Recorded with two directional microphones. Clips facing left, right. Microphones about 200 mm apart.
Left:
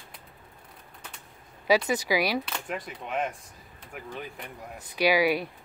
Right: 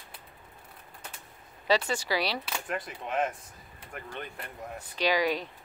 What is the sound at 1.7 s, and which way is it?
Speech, 10° left (ahead or behind).